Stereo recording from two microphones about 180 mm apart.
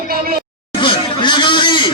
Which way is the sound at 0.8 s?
25° left (ahead or behind).